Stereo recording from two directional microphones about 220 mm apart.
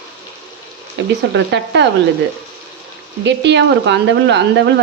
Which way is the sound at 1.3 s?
55° right (ahead or behind).